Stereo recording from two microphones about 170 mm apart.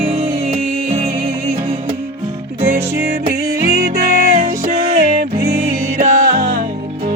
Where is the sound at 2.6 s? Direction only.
15° right (ahead or behind).